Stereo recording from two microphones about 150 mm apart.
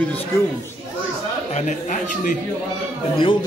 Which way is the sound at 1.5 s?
55° left (ahead or behind).